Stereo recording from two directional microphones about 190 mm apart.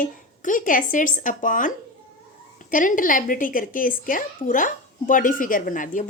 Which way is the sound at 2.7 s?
45° left (ahead or behind).